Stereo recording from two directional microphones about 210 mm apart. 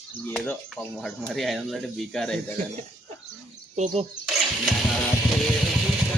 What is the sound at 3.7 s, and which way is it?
Speech, 35° right (ahead or behind).